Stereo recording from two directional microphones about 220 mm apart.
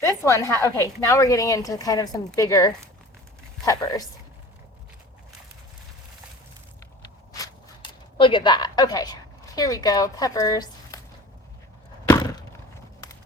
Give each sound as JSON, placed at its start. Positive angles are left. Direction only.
{"t": 0.0, "sound": "speech", "side_deg": 15}
{"t": 8.2, "sound": "a woman's voice", "side_deg": 20}
{"t": 12.0, "sound": "a sound", "side_deg": 15}